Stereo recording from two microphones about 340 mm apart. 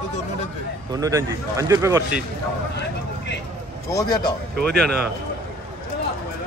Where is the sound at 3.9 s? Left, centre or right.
Centre.